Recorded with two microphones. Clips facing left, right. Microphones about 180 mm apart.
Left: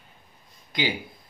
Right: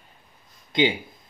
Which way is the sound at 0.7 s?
25° right (ahead or behind).